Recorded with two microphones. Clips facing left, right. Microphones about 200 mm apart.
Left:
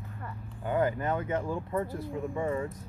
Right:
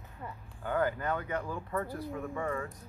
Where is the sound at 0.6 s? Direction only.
20° left (ahead or behind).